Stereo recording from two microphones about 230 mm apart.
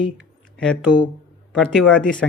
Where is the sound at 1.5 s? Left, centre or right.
Centre.